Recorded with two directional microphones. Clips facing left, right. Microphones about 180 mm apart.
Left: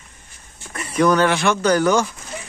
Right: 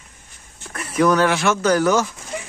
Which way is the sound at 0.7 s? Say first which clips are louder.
Even; centre (ahead or behind).